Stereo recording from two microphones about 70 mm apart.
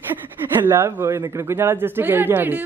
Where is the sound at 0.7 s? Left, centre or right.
Right.